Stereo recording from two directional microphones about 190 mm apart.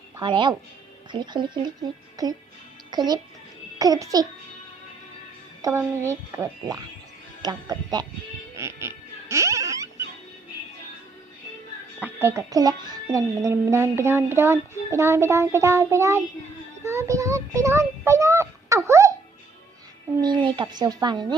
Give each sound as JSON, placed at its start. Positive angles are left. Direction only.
{"t": 0.2, "sound": "speech", "side_deg": -25}
{"t": 5.6, "sound": "a woman's voice", "side_deg": -15}
{"t": 8.5, "sound": "music", "side_deg": -15}
{"t": 12.0, "sound": "a woman's voice", "side_deg": -15}
{"t": 16.8, "sound": "child singing", "side_deg": -15}
{"t": 20.2, "sound": "speech", "side_deg": -25}